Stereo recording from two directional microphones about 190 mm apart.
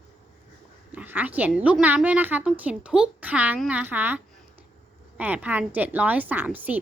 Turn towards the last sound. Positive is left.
turn(degrees=-10)  # may be behind; listen again after turning